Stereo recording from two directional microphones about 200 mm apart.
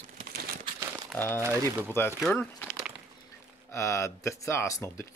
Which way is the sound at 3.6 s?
15° left (ahead or behind).